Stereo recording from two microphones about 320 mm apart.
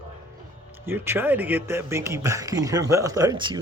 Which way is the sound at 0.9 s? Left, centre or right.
Centre.